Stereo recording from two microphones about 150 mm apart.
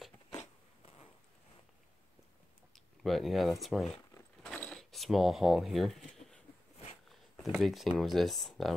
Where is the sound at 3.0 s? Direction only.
Centre (ahead or behind).